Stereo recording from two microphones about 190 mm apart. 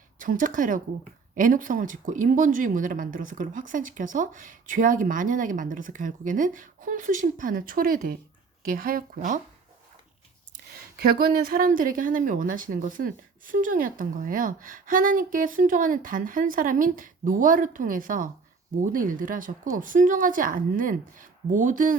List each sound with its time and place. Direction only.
0.2 s a woman's voice: 45° right (ahead or behind)
10.9 s a woman's voice: 50° right (ahead or behind)